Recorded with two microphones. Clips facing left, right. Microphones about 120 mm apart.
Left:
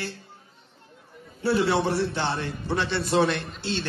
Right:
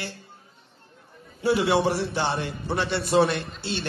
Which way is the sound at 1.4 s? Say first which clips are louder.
Right 1 dB; 15° right (ahead or behind).